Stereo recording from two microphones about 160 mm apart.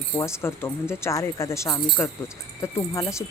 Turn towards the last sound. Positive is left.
turn(degrees=20)  # may be behind; listen again after turning